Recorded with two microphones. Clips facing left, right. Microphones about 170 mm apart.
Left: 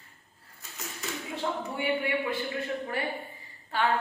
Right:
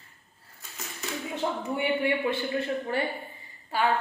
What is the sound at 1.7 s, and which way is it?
Speech, 25° right (ahead or behind).